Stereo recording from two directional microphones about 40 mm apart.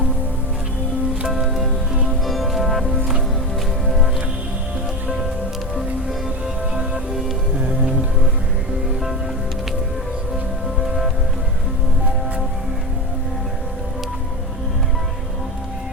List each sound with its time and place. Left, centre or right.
1.3 s music: centre
3.8 s music: centre
7.7 s music: right
10.8 s music: centre